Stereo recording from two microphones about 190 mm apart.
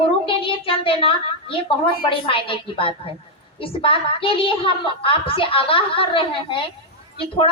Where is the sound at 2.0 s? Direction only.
30° left (ahead or behind).